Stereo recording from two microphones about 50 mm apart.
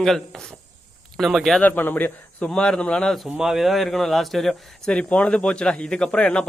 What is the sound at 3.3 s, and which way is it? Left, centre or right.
Speech, centre.